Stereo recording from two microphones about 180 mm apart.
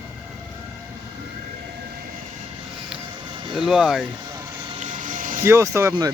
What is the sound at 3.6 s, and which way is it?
Speech, 5° right (ahead or behind).